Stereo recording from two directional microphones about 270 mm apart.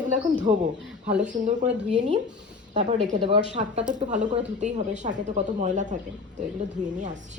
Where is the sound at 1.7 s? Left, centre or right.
Right.